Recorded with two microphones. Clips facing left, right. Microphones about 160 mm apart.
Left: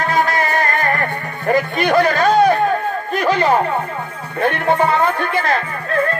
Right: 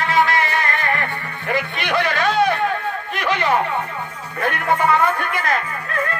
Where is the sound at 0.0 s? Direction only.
45° left (ahead or behind).